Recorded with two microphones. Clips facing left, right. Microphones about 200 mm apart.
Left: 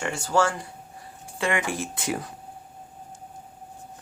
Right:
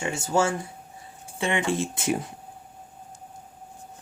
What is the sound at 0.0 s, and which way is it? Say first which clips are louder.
Speech: even; 20° right (ahead or behind).